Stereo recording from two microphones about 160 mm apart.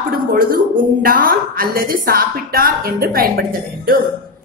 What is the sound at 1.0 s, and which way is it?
A woman's voice, 65° right (ahead or behind).